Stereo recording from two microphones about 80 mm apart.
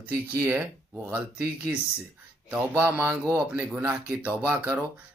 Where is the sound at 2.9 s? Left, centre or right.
Right.